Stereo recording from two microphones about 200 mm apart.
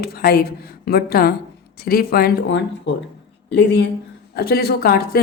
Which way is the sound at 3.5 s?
60° left (ahead or behind).